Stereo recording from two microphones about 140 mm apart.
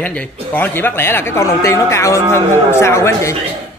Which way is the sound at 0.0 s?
10° left (ahead or behind).